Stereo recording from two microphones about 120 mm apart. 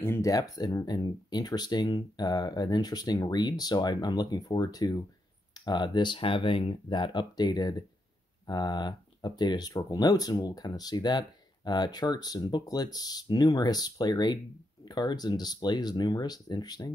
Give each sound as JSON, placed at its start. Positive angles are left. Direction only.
{"t": 0.0, "sound": "speech", "side_deg": 25}